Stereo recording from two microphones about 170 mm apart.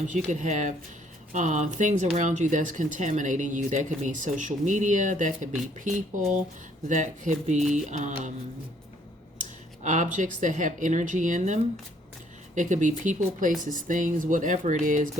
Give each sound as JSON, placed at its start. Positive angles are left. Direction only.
{"t": 0.1, "sound": "speech", "side_deg": -45}
{"t": 9.4, "sound": "speech", "side_deg": -50}